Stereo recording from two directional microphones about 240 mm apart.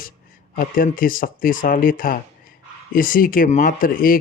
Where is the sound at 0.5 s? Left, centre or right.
Left.